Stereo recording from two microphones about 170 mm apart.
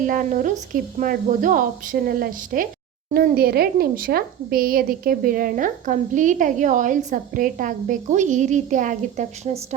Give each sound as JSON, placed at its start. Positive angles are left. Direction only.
{"t": 0.0, "sound": "a woman's voice", "side_deg": -50}